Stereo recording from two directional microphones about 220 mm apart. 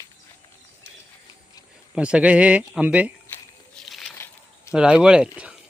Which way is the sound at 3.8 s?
Centre (ahead or behind).